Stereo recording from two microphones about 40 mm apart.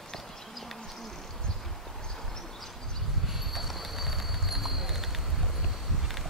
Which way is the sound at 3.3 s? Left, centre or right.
Centre.